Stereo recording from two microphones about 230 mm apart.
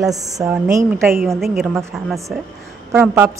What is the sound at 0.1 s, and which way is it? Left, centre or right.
A woman's voice, centre.